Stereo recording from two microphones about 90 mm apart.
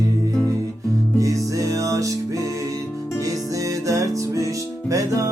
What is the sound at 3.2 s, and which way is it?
Music, 40° right (ahead or behind).